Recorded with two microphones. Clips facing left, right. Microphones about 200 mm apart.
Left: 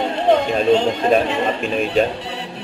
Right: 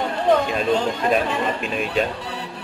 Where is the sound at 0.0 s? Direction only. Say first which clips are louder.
Left 2 dB; 25° left (ahead or behind).